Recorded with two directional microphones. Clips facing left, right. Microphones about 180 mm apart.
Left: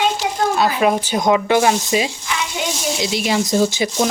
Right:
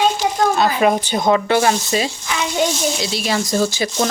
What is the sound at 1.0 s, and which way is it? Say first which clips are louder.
Speech: even; 10° left (ahead or behind).